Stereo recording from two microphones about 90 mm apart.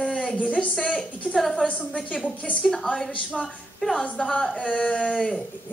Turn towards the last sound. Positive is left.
turn(degrees=10)  # may be behind; listen again after turning